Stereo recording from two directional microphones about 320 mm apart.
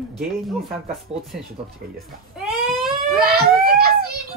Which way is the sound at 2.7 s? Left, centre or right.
Centre.